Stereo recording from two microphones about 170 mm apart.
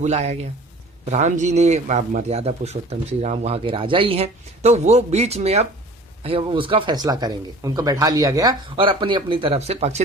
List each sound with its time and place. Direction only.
0.0 s a man's voice: 40° right (ahead or behind)